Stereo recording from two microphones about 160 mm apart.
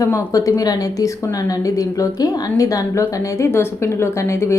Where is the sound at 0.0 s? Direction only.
20° left (ahead or behind).